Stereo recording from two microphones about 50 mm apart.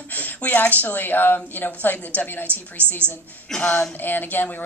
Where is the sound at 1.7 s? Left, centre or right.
Left.